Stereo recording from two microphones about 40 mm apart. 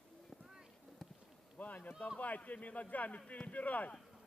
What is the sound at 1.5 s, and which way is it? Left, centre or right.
A man's voice, left.